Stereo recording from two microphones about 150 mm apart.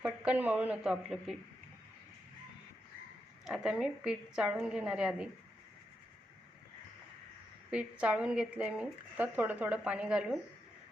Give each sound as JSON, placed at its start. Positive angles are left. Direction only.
{"t": 0.0, "sound": "a woman's voice", "side_deg": -10}
{"t": 3.4, "sound": "a woman's voice", "side_deg": -5}
{"t": 7.7, "sound": "speech", "side_deg": -5}